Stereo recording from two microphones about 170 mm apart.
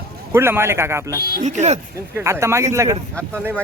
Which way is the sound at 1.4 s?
45° right (ahead or behind).